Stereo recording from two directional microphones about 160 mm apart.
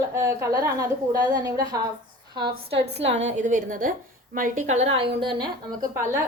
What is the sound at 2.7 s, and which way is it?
Speech, 90° right.